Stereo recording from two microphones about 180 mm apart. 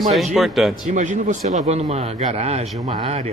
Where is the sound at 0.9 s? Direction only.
45° right (ahead or behind).